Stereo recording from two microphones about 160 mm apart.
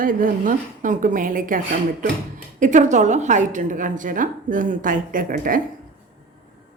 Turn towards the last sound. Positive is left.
turn(degrees=-60)  # may be behind; listen again after turning